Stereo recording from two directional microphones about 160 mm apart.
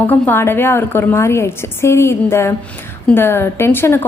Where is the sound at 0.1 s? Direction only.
10° left (ahead or behind).